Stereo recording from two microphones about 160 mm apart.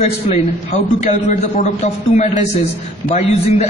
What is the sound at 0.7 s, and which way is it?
A man's voice, 45° left (ahead or behind).